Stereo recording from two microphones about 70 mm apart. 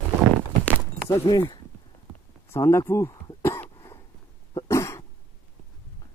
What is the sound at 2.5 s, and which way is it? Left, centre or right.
Speech, left.